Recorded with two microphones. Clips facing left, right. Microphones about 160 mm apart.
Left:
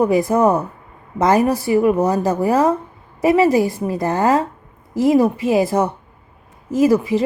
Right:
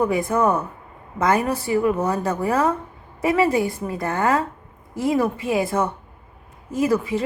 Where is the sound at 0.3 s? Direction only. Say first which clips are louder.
Left 5 dB; 20° left (ahead or behind).